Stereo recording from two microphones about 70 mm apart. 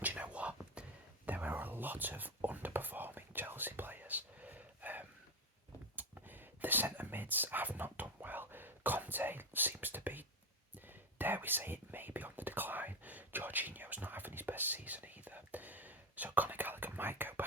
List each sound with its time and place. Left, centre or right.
0.0 s whispering: right
6.0 s a sound: right
10.8 s whispering: right